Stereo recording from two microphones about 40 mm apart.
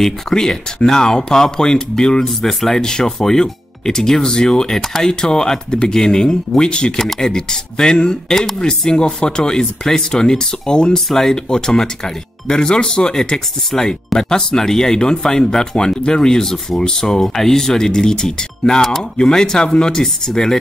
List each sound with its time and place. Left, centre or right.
0.0 s speech: centre